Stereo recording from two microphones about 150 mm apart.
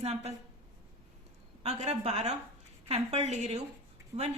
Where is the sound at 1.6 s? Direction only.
45° right (ahead or behind).